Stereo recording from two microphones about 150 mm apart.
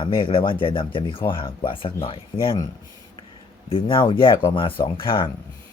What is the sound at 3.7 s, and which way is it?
Speech, 35° left (ahead or behind).